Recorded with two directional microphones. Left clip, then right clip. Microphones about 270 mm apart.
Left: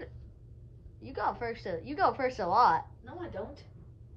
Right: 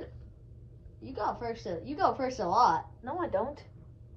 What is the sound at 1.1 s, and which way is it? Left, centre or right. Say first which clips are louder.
Speech: even; centre.